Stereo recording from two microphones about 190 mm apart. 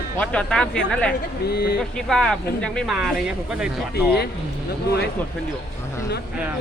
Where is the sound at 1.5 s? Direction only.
60° left (ahead or behind).